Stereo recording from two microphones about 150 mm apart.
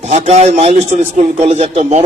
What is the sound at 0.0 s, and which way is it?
A man's voice, 50° right (ahead or behind).